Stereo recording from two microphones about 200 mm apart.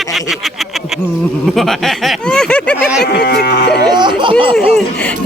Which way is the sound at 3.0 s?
55° left (ahead or behind).